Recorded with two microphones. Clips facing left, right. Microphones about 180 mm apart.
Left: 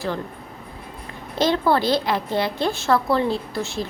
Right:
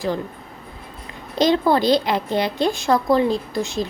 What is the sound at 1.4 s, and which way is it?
A woman's voice, 15° right (ahead or behind).